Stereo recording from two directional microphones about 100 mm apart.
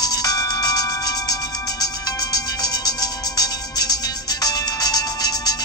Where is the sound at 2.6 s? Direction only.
40° left (ahead or behind).